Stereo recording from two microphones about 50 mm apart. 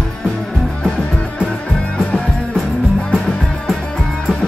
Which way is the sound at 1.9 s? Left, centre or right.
Centre.